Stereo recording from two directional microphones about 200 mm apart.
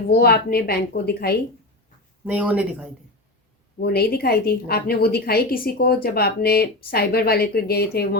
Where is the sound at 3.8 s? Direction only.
50° left (ahead or behind).